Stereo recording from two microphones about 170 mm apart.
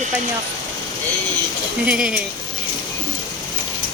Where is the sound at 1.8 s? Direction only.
5° right (ahead or behind).